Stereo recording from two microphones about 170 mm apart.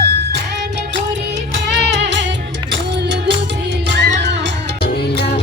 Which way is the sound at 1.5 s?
90° right.